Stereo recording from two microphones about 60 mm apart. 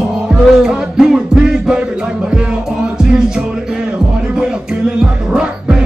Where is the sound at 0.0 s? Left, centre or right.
Centre.